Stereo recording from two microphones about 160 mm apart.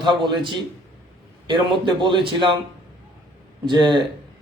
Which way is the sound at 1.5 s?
30° right (ahead or behind).